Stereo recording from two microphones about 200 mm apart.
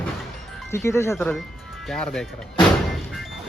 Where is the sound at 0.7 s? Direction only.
15° left (ahead or behind).